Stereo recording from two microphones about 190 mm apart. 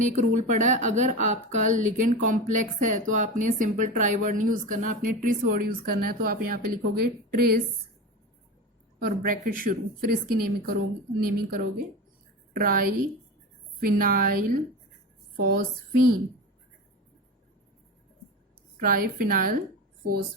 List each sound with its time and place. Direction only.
0.0 s a woman's voice: 40° right (ahead or behind)
9.0 s speech: 50° right (ahead or behind)
18.8 s speech: 50° right (ahead or behind)